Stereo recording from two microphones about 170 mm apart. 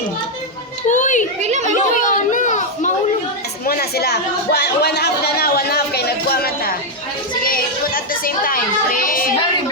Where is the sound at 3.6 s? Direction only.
65° left (ahead or behind).